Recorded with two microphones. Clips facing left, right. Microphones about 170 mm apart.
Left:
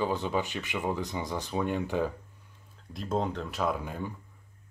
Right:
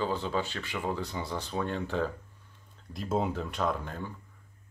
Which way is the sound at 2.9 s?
5° right (ahead or behind).